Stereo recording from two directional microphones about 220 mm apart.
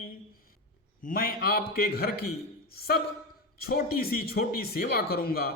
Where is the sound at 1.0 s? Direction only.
40° left (ahead or behind).